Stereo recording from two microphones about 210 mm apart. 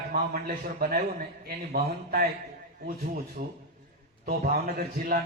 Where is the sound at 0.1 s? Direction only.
45° right (ahead or behind).